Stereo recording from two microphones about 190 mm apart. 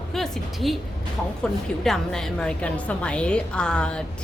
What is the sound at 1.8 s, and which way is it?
A woman's voice, centre (ahead or behind).